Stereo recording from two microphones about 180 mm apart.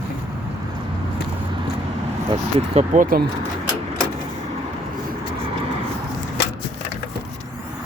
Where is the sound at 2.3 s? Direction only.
35° right (ahead or behind); by 3.2 s 50° right (ahead or behind).